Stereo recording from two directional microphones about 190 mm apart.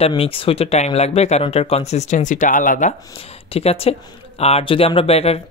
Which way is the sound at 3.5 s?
30° left (ahead or behind).